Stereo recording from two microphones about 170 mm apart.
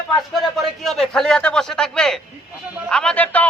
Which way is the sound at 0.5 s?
Centre (ahead or behind).